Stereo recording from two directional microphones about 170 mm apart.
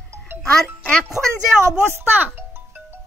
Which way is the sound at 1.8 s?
15° right (ahead or behind).